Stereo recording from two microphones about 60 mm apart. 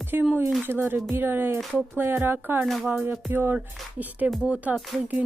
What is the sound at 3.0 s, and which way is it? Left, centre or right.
Speech, right.